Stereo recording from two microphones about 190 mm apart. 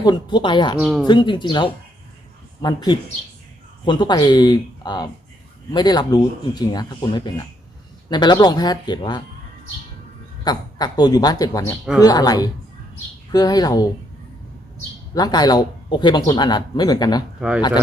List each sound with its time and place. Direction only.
0.0 s speech: 25° left (ahead or behind)
0.8 s speech: 5° right (ahead or behind)
1.0 s speech: 25° left (ahead or behind)
10.4 s speech: 20° left (ahead or behind)
15.1 s speech: 20° left (ahead or behind)